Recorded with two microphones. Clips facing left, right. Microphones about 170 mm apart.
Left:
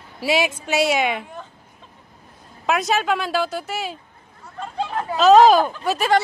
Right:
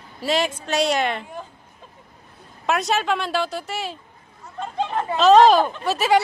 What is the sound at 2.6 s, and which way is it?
Speech, centre (ahead or behind).